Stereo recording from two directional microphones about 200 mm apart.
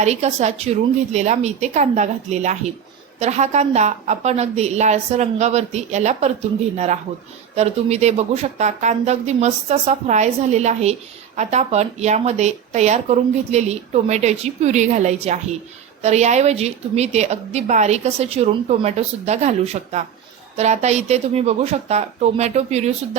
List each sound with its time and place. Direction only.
0.0 s a woman's voice: 35° right (ahead or behind)